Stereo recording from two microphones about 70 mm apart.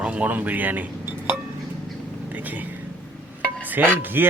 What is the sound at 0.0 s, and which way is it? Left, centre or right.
Speech, centre.